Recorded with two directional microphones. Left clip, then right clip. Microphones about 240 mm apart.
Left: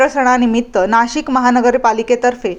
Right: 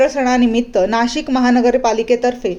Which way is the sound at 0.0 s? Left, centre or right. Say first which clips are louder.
Left 2 dB; centre.